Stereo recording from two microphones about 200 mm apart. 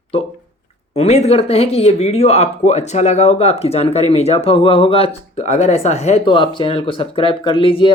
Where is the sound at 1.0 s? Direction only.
30° left (ahead or behind).